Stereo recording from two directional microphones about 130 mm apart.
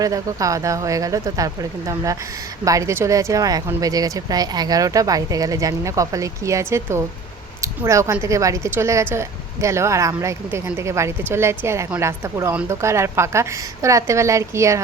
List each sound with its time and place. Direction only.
0.0 s speech: 25° right (ahead or behind)
2.6 s speech: 25° right (ahead or behind)